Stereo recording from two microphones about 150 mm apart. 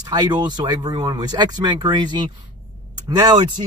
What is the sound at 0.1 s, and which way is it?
Speech, 30° right (ahead or behind).